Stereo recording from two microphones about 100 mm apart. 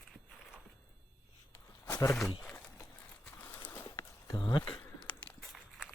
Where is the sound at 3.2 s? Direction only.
15° left (ahead or behind).